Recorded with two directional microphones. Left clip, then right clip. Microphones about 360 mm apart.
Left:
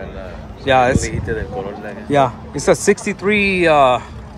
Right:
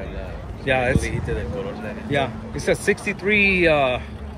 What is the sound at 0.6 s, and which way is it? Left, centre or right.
Speech, centre.